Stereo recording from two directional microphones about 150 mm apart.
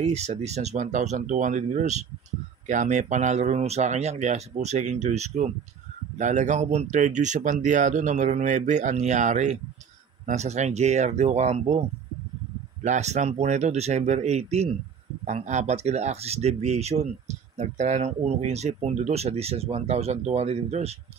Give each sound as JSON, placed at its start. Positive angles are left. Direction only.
{"t": 0.0, "sound": "speech", "side_deg": -50}
{"t": 12.8, "sound": "speech", "side_deg": -50}